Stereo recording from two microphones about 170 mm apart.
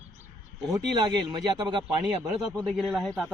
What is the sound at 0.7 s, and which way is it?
Speech, 25° right (ahead or behind).